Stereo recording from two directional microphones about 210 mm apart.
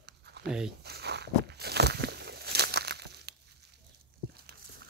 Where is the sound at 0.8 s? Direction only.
50° right (ahead or behind).